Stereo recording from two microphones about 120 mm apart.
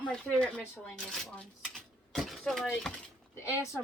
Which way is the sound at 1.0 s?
5° left (ahead or behind).